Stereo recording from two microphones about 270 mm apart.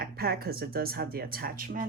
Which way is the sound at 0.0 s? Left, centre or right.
Right.